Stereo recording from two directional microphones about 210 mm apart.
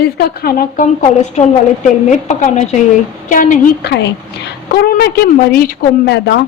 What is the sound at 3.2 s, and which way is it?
A woman's voice, 40° left (ahead or behind).